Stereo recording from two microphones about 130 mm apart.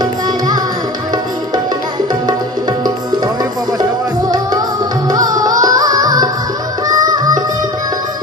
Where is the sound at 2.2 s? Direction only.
30° right (ahead or behind).